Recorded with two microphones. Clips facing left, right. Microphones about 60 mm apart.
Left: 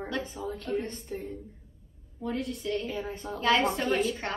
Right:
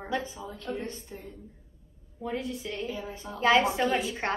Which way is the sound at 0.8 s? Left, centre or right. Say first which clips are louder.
Left 3 dB; left.